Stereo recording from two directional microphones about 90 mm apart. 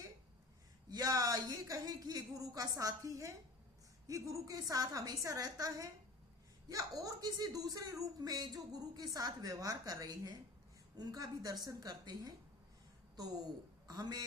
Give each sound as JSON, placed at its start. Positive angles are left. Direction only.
{"t": 0.9, "sound": "a woman's voice", "side_deg": -40}
{"t": 13.8, "sound": "a man's voice", "side_deg": -45}